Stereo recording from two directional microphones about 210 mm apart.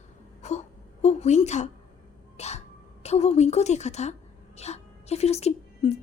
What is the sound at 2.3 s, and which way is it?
Sneeze, 30° left (ahead or behind).